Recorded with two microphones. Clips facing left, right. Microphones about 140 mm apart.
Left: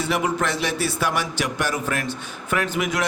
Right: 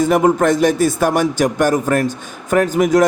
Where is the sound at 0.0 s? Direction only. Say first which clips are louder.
Right 10 dB; 45° right (ahead or behind).